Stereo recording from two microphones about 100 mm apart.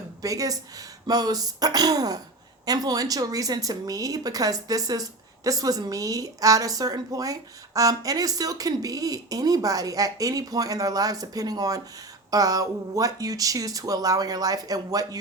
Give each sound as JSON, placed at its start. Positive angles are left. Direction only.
{"t": 0.2, "sound": "a woman's voice", "side_deg": -35}